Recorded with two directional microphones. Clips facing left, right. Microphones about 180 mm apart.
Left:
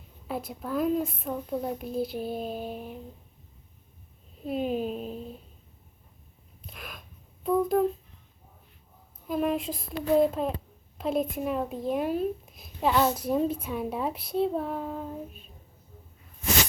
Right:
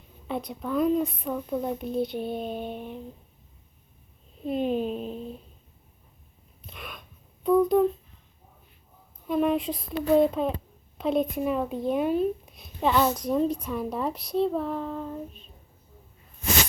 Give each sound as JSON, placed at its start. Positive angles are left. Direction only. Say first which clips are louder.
{"t": 0.3, "sound": "speech", "louder": "right 2 dB", "side_deg": 5}
{"t": 4.4, "sound": "speech", "louder": "right 2 dB", "side_deg": 5}
{"t": 6.7, "sound": "a sound", "louder": "right 2 dB", "side_deg": 0}
{"t": 7.4, "sound": "speech", "louder": "right 4 dB", "side_deg": 5}
{"t": 9.2, "sound": "speech", "louder": "right 3 dB", "side_deg": 0}
{"t": 14.3, "sound": "child singing", "louder": "right 2 dB", "side_deg": 5}